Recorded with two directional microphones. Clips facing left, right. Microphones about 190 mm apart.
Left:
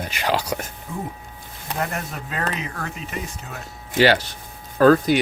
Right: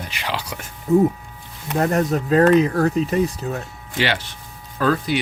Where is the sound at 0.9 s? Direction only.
40° right (ahead or behind).